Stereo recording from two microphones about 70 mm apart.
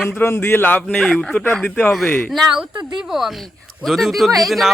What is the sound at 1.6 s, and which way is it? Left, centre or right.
Speech, left.